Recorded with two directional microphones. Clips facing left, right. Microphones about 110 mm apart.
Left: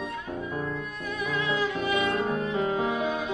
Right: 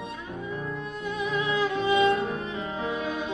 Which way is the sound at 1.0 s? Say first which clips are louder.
Right 2 dB; 25° right (ahead or behind).